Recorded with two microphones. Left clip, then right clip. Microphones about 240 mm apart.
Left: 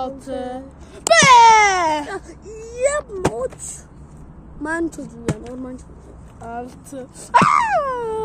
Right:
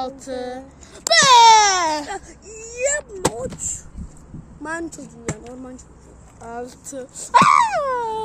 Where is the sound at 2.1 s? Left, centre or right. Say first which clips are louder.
Left 1 dB; centre.